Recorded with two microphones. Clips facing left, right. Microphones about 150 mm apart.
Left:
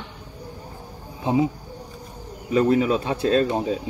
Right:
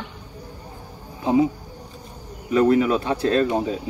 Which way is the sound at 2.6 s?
25° left (ahead or behind).